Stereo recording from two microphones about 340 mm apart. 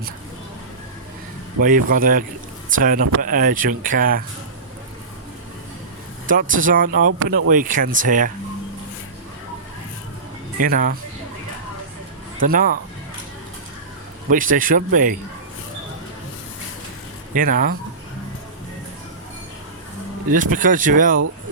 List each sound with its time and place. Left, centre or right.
1.6 s speech: right
6.2 s speech: right
10.6 s speech: right
12.4 s speech: right
14.3 s speech: right
17.3 s speech: right
20.3 s speech: right